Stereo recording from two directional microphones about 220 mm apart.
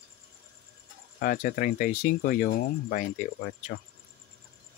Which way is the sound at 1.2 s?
40° left (ahead or behind).